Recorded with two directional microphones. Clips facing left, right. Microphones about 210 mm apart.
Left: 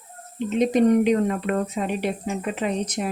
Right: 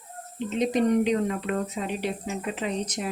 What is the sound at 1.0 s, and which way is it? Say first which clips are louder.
Speech: left 4 dB; 55° left (ahead or behind).